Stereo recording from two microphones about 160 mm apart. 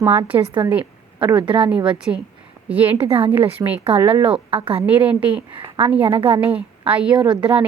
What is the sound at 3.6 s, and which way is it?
Speech, 25° right (ahead or behind).